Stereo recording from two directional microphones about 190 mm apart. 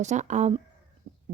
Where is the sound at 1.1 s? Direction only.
50° right (ahead or behind).